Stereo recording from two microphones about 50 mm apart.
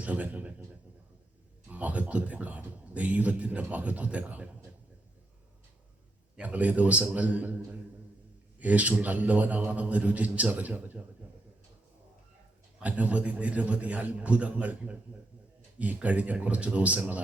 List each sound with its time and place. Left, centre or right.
0.0 s speech: right
1.6 s a man's voice: right
6.4 s a man's voice: right
12.8 s a man's voice: right